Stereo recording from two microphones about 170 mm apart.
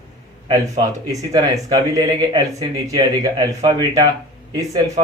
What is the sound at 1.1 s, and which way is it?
Speech, 20° right (ahead or behind).